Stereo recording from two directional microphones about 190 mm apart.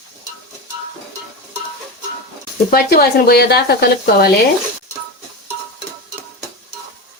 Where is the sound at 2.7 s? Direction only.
55° left (ahead or behind).